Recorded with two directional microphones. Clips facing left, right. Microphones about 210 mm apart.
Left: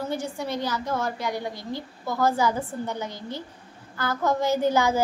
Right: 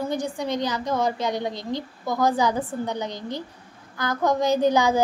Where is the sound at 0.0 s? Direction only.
15° right (ahead or behind).